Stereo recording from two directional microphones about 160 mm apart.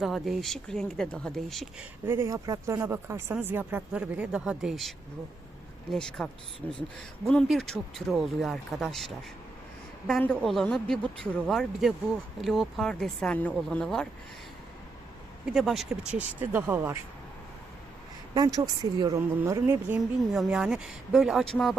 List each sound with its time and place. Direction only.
0.0 s speech: centre (ahead or behind)
2.0 s speech: 15° right (ahead or behind); by 14.1 s 5° left (ahead or behind)
15.4 s speech: centre (ahead or behind)
18.3 s speech: 25° right (ahead or behind)
20.3 s speech: centre (ahead or behind)